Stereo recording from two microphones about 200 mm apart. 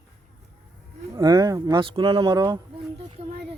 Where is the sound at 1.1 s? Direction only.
20° right (ahead or behind).